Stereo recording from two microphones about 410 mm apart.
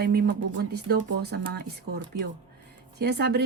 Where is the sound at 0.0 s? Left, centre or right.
Right.